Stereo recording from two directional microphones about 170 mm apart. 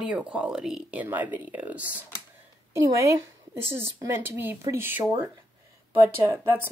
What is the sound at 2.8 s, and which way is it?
A woman's voice, 20° right (ahead or behind).